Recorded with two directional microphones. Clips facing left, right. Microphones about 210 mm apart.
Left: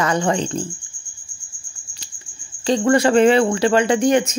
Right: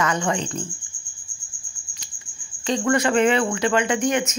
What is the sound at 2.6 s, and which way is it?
Speech, 35° left (ahead or behind).